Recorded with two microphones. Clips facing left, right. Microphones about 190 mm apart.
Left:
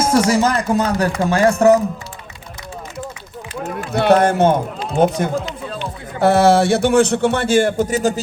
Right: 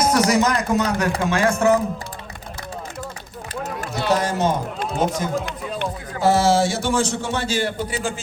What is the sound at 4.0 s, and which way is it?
Speech, 60° left (ahead or behind).